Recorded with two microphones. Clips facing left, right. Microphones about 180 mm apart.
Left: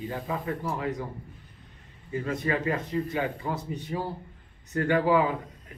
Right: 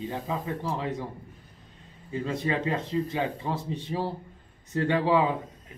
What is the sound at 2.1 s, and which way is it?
Speech, 25° right (ahead or behind).